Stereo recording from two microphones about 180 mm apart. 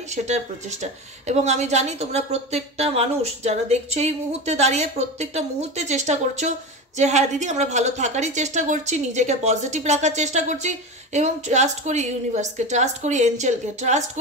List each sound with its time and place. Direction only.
0.1 s speech: 40° right (ahead or behind)